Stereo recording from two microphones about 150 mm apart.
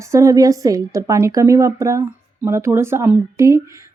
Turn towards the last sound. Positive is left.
turn(degrees=-20)  # may be behind; listen again after turning